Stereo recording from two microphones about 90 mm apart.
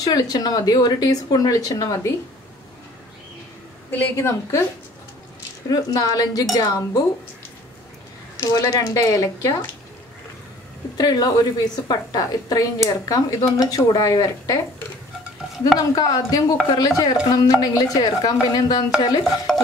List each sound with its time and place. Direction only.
0.0 s speech: 45° left (ahead or behind)
3.9 s speech: 30° left (ahead or behind)
5.7 s speech: 45° left (ahead or behind)
8.4 s speech: 40° left (ahead or behind)
11.0 s speech: 45° left (ahead or behind)
15.9 s speech: 45° left (ahead or behind)
19.2 s a sound: centre (ahead or behind)